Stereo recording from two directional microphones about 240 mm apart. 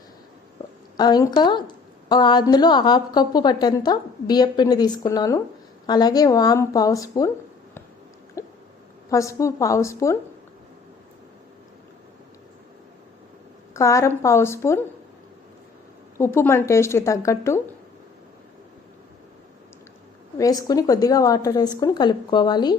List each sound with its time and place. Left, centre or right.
0.9 s a woman's voice: centre
8.4 s hiccup: centre
9.0 s a woman's voice: centre
13.7 s a woman's voice: centre
16.1 s a woman's voice: centre
20.4 s a woman's voice: centre